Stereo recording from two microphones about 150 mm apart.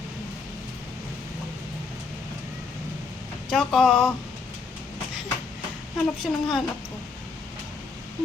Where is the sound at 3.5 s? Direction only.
Centre (ahead or behind).